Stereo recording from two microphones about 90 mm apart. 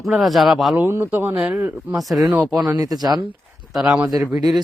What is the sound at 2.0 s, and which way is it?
Speech, centre (ahead or behind).